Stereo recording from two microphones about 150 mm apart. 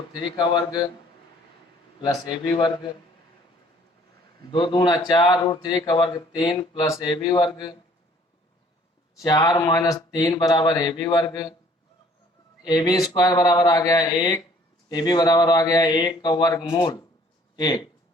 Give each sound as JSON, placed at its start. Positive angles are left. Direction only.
{"t": 0.3, "sound": "speech", "side_deg": 30}
{"t": 2.0, "sound": "speech", "side_deg": 30}
{"t": 4.5, "sound": "speech", "side_deg": 35}
{"t": 9.2, "sound": "speech", "side_deg": 25}
{"t": 12.6, "sound": "speech", "side_deg": 25}